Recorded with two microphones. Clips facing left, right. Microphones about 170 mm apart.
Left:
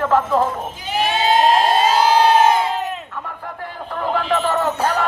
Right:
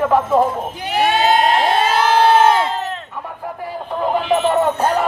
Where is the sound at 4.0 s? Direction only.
15° right (ahead or behind).